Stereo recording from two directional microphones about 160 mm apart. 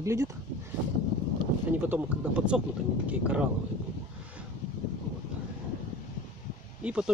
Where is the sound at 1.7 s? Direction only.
10° right (ahead or behind).